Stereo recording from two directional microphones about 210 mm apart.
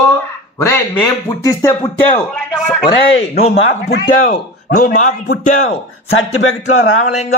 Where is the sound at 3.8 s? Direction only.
40° left (ahead or behind).